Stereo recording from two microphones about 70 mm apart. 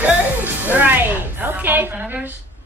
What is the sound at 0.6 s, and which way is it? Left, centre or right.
Speech, right.